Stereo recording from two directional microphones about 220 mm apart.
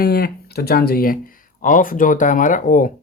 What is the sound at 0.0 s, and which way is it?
Speech, 45° left (ahead or behind).